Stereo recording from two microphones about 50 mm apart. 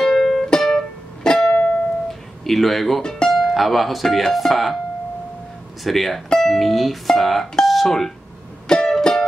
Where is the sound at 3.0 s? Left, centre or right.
Centre.